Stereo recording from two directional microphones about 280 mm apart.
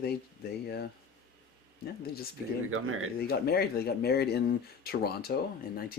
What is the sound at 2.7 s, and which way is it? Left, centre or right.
Speech, right.